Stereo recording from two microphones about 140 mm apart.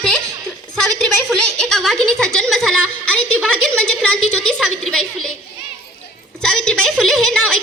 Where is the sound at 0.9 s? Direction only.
5° left (ahead or behind).